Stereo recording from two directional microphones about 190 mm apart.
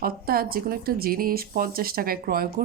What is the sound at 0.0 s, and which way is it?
Speech, 50° right (ahead or behind).